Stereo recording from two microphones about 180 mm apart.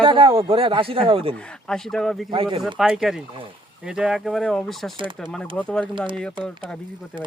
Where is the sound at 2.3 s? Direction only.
30° right (ahead or behind).